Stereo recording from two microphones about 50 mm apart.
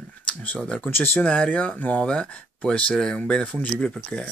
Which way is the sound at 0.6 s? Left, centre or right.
Centre.